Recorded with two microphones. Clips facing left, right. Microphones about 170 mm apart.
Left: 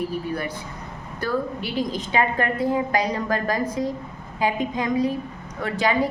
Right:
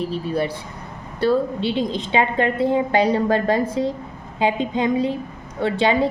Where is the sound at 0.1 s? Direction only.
25° right (ahead or behind).